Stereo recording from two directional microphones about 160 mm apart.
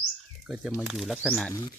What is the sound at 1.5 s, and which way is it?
Speech, 25° left (ahead or behind).